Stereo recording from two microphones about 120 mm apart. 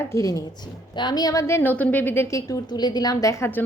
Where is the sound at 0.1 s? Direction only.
25° left (ahead or behind).